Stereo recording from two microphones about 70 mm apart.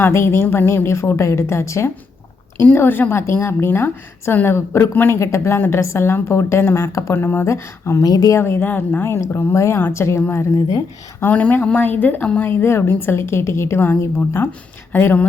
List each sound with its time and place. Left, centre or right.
0.0 s a woman's voice: left
2.6 s a woman's voice: left
8.0 s speech: left
8.3 s a woman's voice: left
11.2 s speech: left
12.5 s a woman's voice: left